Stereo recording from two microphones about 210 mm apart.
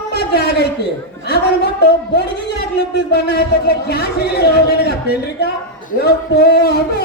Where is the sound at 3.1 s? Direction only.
50° left (ahead or behind).